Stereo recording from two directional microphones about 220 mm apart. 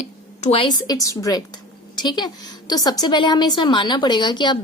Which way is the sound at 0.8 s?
15° left (ahead or behind).